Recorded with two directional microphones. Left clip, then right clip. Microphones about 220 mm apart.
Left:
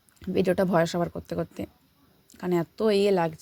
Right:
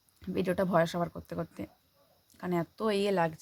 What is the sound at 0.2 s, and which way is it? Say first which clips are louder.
Speech: left 7 dB; 15° left (ahead or behind).